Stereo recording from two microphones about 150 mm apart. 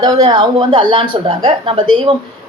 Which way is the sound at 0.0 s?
25° right (ahead or behind).